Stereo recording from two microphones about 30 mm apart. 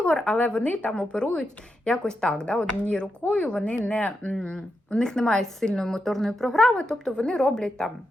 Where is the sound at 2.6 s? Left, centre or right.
Left.